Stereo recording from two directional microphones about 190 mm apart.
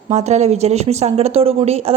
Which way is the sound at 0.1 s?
35° right (ahead or behind).